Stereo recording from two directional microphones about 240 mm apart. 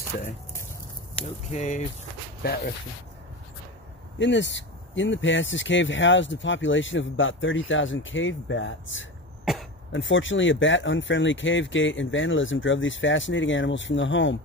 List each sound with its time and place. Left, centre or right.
1.5 s speech: left
4.2 s speech: left
9.4 s cough: centre
9.9 s speech: left